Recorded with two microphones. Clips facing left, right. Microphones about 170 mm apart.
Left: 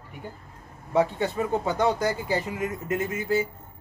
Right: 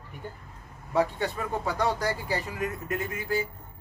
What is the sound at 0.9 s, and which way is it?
Speech, 20° left (ahead or behind).